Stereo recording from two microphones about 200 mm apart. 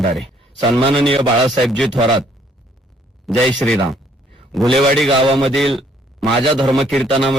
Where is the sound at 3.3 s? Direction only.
Centre (ahead or behind).